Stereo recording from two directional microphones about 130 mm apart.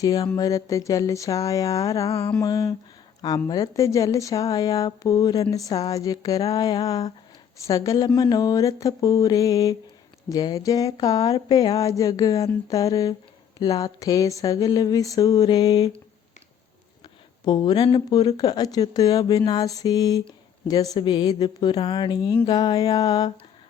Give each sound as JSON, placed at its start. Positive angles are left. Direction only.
{"t": 0.0, "sound": "speech", "side_deg": 30}
{"t": 2.0, "sound": "mantra", "side_deg": 45}
{"t": 2.4, "sound": "speech", "side_deg": 25}
{"t": 17.4, "sound": "a woman's voice", "side_deg": 35}